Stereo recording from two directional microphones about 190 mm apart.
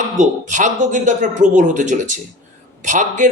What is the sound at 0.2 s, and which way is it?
A man's voice, 40° right (ahead or behind).